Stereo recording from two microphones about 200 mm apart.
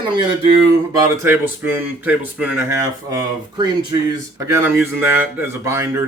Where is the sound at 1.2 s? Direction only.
10° right (ahead or behind).